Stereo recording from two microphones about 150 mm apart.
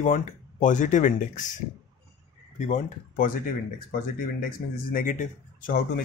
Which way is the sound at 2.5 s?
60° left (ahead or behind).